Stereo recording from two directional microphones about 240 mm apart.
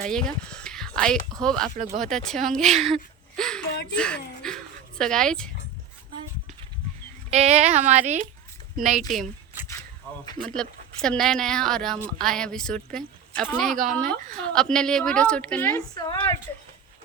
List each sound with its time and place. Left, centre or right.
0.0 s a woman's voice: centre
2.8 s a sound: centre
3.9 s speech: centre
7.3 s a woman's voice: right
10.4 s a woman's voice: centre